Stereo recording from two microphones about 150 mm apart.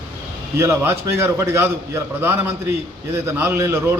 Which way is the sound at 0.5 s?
15° right (ahead or behind).